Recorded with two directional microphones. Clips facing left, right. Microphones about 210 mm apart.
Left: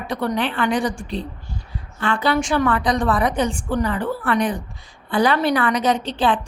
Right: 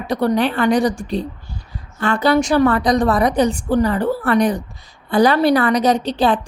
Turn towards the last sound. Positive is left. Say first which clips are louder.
# right 3 dB
turn(degrees=-40)  # may be behind; listen again after turning